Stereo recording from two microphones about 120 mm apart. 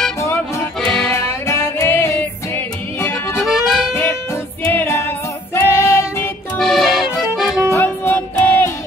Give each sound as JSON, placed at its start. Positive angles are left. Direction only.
{"t": 0.2, "sound": "music", "side_deg": 25}
{"t": 0.7, "sound": "music", "side_deg": 5}
{"t": 1.1, "sound": "music", "side_deg": 20}
{"t": 3.4, "sound": "music", "side_deg": -5}
{"t": 4.6, "sound": "music", "side_deg": 20}
{"t": 6.6, "sound": "accordion", "side_deg": 0}
{"t": 7.7, "sound": "music", "side_deg": 20}